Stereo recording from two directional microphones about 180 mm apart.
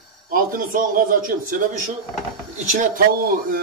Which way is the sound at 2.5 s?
50° right (ahead or behind).